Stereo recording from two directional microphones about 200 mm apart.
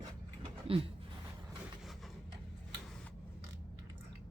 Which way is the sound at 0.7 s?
30° right (ahead or behind).